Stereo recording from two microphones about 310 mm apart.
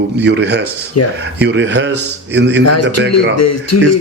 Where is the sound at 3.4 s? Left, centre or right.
Left.